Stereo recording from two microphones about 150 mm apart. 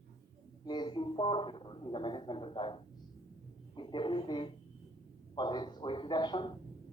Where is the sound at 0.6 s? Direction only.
30° left (ahead or behind).